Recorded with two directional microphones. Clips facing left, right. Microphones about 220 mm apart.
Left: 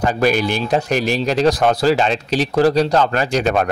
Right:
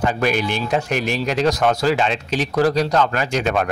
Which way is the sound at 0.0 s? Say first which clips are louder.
Left 3 dB; 35° left (ahead or behind).